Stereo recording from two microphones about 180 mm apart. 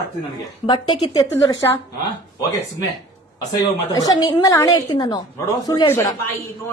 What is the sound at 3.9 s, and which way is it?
A man's voice, 20° left (ahead or behind).